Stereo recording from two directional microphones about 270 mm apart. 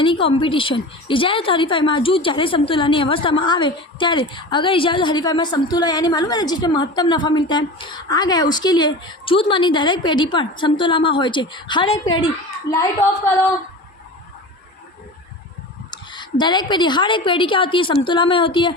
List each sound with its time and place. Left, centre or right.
0.0 s a woman's voice: centre
15.9 s a woman's voice: centre